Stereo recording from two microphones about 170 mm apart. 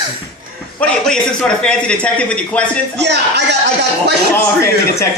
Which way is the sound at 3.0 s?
90° right.